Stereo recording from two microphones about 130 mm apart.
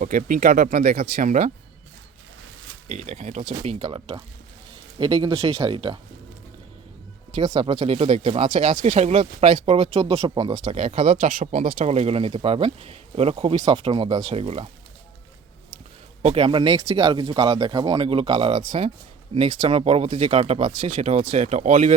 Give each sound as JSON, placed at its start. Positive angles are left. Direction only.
{"t": 0.0, "sound": "speech", "side_deg": -85}
{"t": 2.9, "sound": "speech", "side_deg": -65}
{"t": 3.8, "sound": "speech", "side_deg": -40}
{"t": 7.3, "sound": "speech", "side_deg": -35}
{"t": 8.4, "sound": "speech", "side_deg": -75}
{"t": 10.7, "sound": "speech", "side_deg": -55}
{"t": 11.2, "sound": "speech", "side_deg": -90}
{"t": 11.9, "sound": "speech", "side_deg": -50}
{"t": 13.3, "sound": "speech", "side_deg": -40}
{"t": 14.3, "sound": "speech", "side_deg": -50}
{"t": 16.2, "sound": "speech", "side_deg": -45}
{"t": 20.1, "sound": "speech", "side_deg": -40}